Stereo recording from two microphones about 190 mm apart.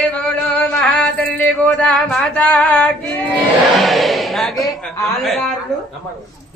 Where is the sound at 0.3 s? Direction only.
5° left (ahead or behind).